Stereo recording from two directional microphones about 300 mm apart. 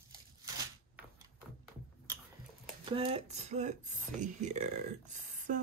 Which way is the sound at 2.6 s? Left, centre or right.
Centre.